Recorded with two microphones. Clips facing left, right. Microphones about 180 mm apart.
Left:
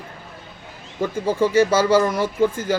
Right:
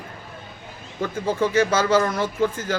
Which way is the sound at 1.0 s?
10° left (ahead or behind).